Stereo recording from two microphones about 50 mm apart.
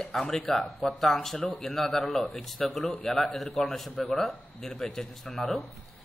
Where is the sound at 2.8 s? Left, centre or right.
Left.